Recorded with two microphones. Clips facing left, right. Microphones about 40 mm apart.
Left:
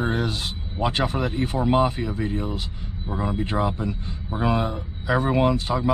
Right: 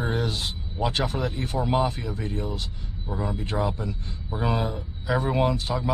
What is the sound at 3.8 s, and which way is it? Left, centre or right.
Speech, centre.